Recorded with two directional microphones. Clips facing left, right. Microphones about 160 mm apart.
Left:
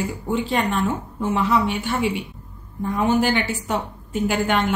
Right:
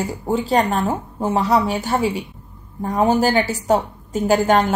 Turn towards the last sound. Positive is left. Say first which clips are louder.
# right 5 dB
turn(degrees=-40)  # may be behind; listen again after turning